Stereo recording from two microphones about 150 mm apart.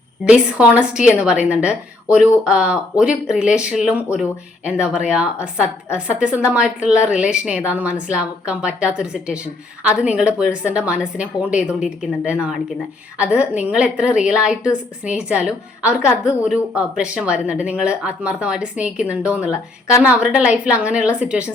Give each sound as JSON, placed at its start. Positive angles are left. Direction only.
{"t": 0.3, "sound": "a woman's voice", "side_deg": -5}